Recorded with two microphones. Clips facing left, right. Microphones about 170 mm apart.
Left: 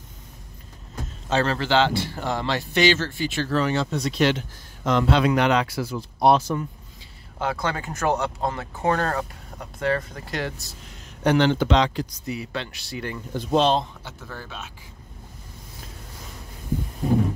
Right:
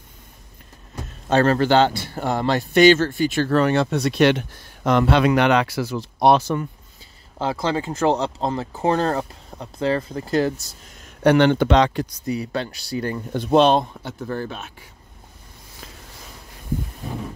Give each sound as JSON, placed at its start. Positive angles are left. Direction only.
{"t": 1.3, "sound": "speech", "side_deg": -50}
{"t": 7.3, "sound": "speech", "side_deg": -30}
{"t": 11.2, "sound": "speech", "side_deg": -60}
{"t": 12.3, "sound": "speech", "side_deg": -40}
{"t": 13.3, "sound": "speech", "side_deg": -60}